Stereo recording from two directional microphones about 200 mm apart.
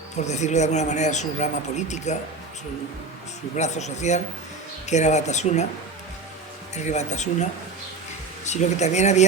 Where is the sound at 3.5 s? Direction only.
35° left (ahead or behind).